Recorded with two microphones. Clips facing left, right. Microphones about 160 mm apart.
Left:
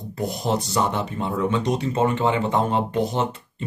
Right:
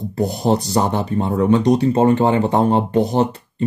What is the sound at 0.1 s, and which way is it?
Speech, 35° right (ahead or behind).